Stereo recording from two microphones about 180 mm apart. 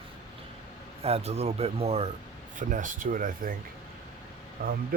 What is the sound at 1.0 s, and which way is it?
Speech, 35° right (ahead or behind).